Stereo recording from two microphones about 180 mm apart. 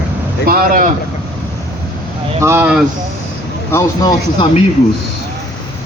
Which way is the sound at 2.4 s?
10° right (ahead or behind).